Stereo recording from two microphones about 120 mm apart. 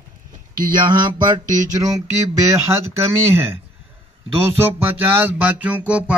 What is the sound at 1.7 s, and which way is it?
A man's voice, 30° right (ahead or behind).